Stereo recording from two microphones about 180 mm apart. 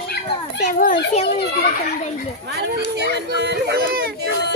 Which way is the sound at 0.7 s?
50° left (ahead or behind).